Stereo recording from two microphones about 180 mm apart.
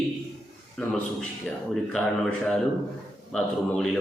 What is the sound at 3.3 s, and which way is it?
Speech, 5° left (ahead or behind).